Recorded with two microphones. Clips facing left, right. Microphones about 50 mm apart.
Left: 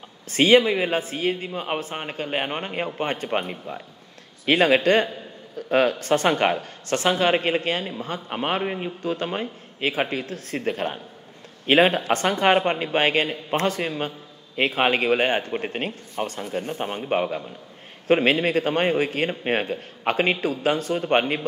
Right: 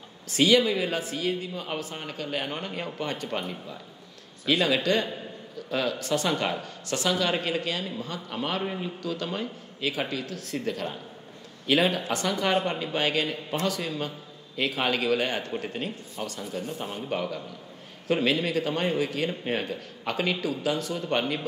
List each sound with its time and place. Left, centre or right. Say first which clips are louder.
0.3 s a man's voice: left 5 dB; left